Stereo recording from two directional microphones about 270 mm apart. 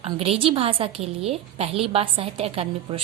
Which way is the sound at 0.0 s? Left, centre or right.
Right.